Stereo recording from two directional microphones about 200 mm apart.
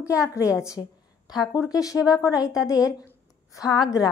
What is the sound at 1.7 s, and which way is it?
Speech, 15° left (ahead or behind).